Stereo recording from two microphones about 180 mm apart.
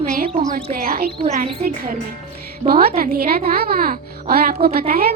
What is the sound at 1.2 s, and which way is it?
Speech, 35° right (ahead or behind).